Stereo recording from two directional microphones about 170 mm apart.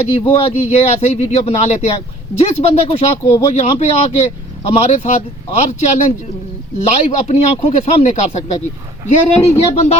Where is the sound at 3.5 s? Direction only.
40° left (ahead or behind).